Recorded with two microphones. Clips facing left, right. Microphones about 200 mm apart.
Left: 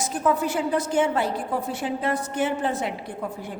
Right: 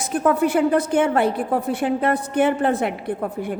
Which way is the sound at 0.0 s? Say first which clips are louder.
Right 5 dB; 60° right (ahead or behind).